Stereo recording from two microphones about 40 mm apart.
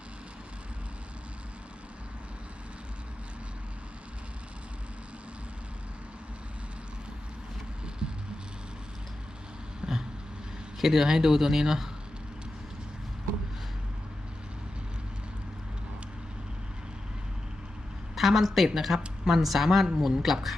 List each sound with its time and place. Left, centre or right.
9.8 s vehicle: right
10.8 s a woman's voice: centre
18.1 s a woman's voice: centre